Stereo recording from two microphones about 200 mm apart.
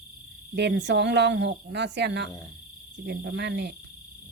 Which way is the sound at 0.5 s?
60° right (ahead or behind).